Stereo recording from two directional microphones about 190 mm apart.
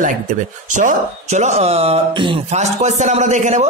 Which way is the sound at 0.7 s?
40° right (ahead or behind).